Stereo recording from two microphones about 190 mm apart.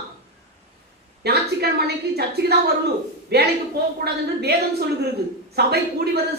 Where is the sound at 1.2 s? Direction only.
60° right (ahead or behind).